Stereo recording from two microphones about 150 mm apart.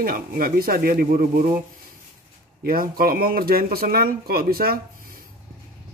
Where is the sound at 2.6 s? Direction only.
75° right (ahead or behind).